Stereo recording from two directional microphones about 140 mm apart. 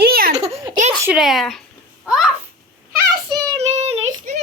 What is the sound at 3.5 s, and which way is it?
Child singing, 50° right (ahead or behind).